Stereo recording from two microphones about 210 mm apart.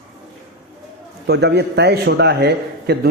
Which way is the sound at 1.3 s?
55° right (ahead or behind).